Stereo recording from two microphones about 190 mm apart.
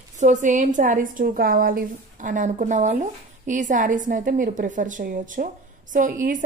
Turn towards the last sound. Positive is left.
turn(degrees=-45)  # may be behind; listen again after turning